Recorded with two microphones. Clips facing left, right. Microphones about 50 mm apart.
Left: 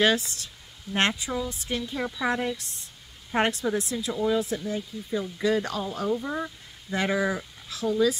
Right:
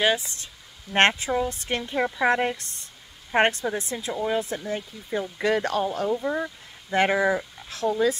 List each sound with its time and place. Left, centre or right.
0.9 s speech: right
6.2 s speech: centre
6.9 s speech: right